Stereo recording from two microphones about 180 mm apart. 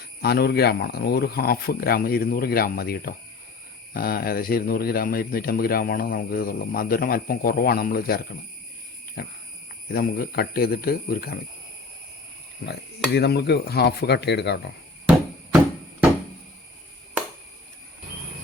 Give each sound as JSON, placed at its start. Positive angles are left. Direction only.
{"t": 0.2, "sound": "speech", "side_deg": 60}
{"t": 12.6, "sound": "speech", "side_deg": 65}